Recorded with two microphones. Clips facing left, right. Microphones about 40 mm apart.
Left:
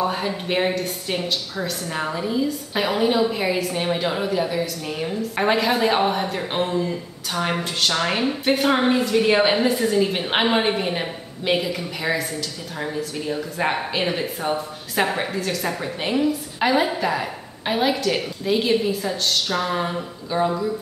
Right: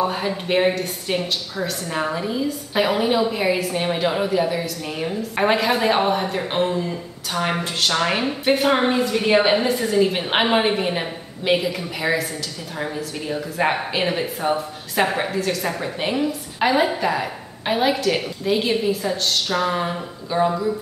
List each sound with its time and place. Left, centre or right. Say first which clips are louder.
0.0 s a woman's voice: right 1 dB; centre